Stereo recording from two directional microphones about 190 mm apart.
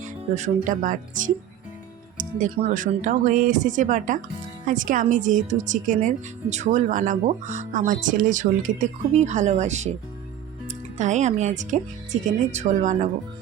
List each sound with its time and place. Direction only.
0.3 s speech: 40° right (ahead or behind)
2.4 s speech: 40° right (ahead or behind)